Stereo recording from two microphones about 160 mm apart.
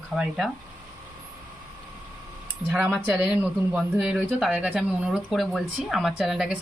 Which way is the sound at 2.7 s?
5° right (ahead or behind).